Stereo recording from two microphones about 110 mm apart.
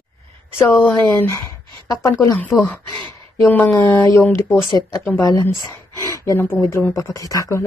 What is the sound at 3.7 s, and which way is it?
Speech, 20° left (ahead or behind).